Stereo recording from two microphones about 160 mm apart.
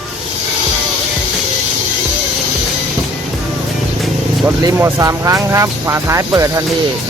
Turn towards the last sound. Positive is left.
turn(degrees=-20)  # may be behind; listen again after turning